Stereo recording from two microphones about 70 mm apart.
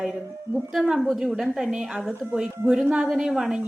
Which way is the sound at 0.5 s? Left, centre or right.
Centre.